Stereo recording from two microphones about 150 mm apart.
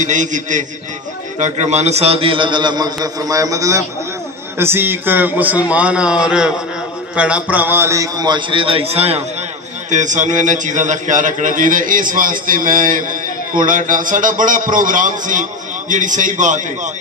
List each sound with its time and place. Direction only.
0.0 s a man's voice: 55° right (ahead or behind)
9.8 s a man's voice: 55° right (ahead or behind)